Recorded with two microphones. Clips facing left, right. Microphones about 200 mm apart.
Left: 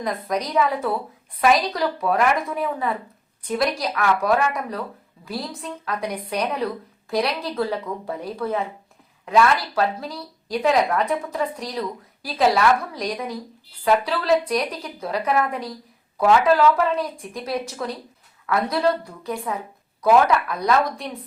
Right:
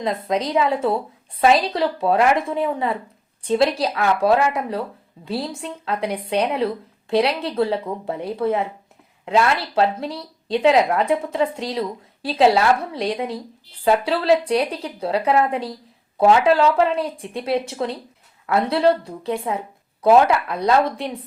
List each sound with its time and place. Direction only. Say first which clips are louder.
0.0 s speech: right 3 dB; 25° right (ahead or behind)